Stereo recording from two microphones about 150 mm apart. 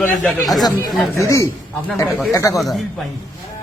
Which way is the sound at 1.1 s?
20° left (ahead or behind).